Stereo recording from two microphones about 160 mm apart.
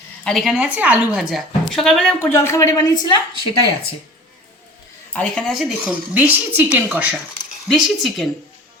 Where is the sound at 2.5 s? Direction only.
20° left (ahead or behind).